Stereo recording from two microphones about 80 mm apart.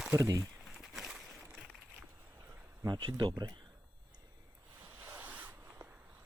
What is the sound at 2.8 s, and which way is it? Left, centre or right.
Speech, right.